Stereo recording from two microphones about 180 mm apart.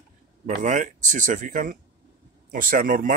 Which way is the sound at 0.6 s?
45° right (ahead or behind).